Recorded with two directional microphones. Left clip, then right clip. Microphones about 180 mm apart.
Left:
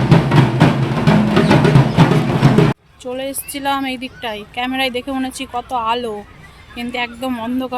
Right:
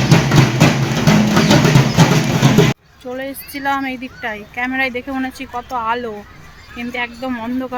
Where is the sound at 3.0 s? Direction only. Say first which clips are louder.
Left 3 dB; 10° left (ahead or behind).